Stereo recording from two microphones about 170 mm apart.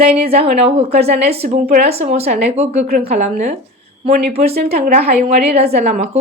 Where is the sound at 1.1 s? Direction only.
70° right (ahead or behind).